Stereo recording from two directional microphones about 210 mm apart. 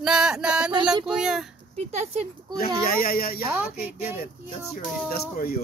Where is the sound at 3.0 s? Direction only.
45° left (ahead or behind).